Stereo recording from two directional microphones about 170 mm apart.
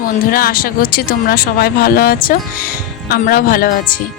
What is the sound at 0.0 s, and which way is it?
Speech, 55° left (ahead or behind).